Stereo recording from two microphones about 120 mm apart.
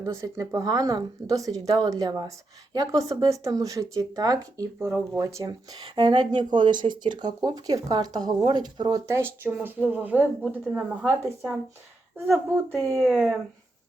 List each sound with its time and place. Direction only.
0.0 s speech: 25° right (ahead or behind)
9.0 s speech: 20° right (ahead or behind)
13.0 s speech: 5° right (ahead or behind)